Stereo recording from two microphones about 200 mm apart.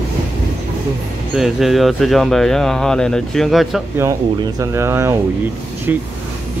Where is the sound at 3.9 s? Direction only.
15° right (ahead or behind).